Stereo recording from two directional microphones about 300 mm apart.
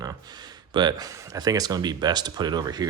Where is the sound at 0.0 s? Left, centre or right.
Centre.